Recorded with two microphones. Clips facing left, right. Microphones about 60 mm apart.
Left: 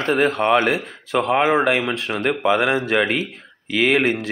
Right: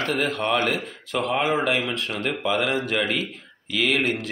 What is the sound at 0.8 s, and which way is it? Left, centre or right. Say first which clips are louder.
Speech: left 5 dB; left.